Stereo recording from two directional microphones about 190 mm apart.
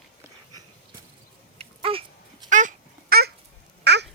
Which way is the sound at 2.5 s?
40° right (ahead or behind).